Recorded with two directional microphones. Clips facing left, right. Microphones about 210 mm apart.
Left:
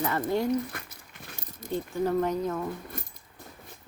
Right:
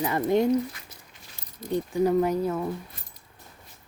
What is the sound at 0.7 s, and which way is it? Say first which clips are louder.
Speech: left 9 dB; 55° left (ahead or behind).